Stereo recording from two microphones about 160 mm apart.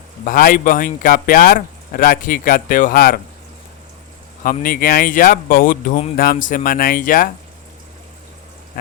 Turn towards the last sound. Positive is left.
turn(degrees=60)  # may be behind; listen again after turning